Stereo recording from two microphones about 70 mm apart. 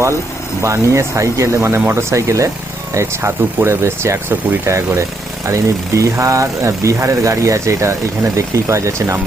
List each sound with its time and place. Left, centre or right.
0.6 s speech: right